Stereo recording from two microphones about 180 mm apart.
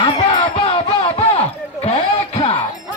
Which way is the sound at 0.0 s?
30° left (ahead or behind).